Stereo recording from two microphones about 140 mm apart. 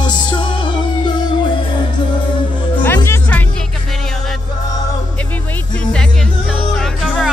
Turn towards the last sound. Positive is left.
turn(degrees=0)  # may be behind; listen again after turning